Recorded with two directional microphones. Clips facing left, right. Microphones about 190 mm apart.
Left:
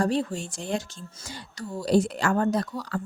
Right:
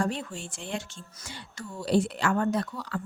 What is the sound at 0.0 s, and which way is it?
Speech, 35° left (ahead or behind).